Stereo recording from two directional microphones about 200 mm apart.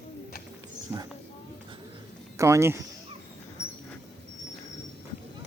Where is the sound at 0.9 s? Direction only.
15° right (ahead or behind).